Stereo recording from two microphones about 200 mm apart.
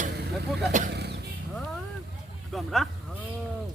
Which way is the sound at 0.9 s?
55° right (ahead or behind).